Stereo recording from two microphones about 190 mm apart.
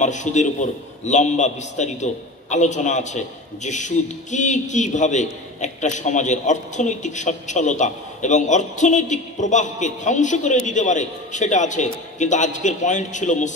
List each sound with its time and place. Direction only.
0.0 s a man's voice: 40° left (ahead or behind)